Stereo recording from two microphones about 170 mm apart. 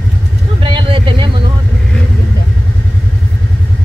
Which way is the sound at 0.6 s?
30° right (ahead or behind).